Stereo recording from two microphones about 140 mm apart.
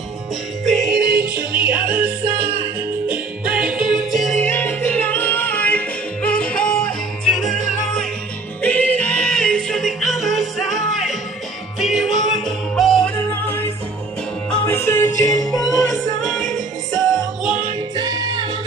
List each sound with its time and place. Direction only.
0.7 s music: centre (ahead or behind)
2.0 s music: 90° right
3.1 s music: 10° right (ahead or behind)
4.4 s music: 15° left (ahead or behind)
13.3 s music: 15° left (ahead or behind)
15.6 s music: centre (ahead or behind)
17.9 s music: 30° right (ahead or behind)